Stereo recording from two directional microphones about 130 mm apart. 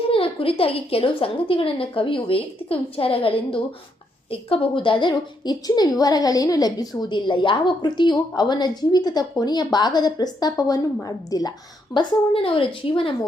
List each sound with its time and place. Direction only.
0.1 s a woman's voice: 45° left (ahead or behind); by 11.5 s 30° left (ahead or behind)
11.9 s a woman's voice: 45° left (ahead or behind)